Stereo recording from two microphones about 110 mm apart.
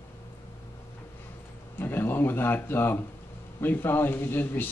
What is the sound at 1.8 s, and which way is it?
Speech, 20° left (ahead or behind).